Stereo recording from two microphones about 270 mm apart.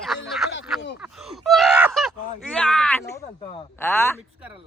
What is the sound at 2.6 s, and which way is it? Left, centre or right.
Speech, centre.